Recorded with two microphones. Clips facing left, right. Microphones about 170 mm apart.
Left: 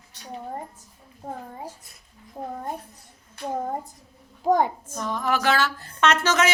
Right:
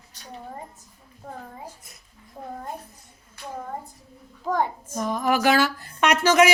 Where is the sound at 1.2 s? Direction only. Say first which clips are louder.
Left 4 dB; 25° left (ahead or behind).